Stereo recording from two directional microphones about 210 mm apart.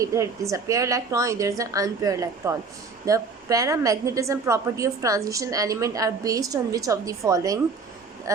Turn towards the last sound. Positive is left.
turn(degrees=-15)  # may be behind; listen again after turning